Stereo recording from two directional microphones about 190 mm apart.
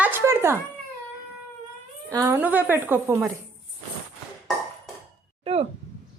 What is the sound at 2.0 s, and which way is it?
A woman's voice, 15° right (ahead or behind).